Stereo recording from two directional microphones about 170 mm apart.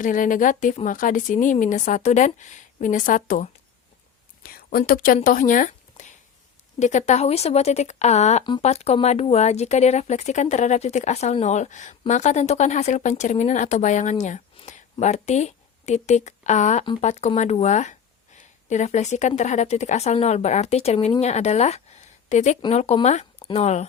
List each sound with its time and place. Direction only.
0.0 s speech: 50° left (ahead or behind)
16.8 s speech: 30° left (ahead or behind)
17.1 s speech: 40° left (ahead or behind)
18.3 s a sound: 45° left (ahead or behind)
19.4 s a woman's voice: 45° left (ahead or behind)